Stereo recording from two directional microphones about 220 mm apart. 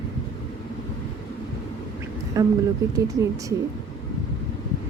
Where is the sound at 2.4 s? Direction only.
15° right (ahead or behind).